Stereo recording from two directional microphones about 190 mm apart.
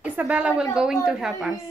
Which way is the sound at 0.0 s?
10° right (ahead or behind).